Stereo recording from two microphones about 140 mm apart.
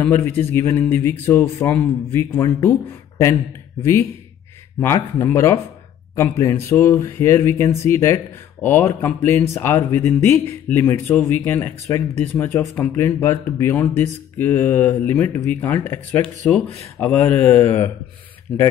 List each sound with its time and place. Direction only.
0.0 s speech: 15° left (ahead or behind)
4.7 s speech: 20° left (ahead or behind)